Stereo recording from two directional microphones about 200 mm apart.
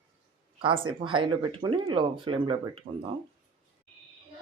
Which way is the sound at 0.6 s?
25° right (ahead or behind).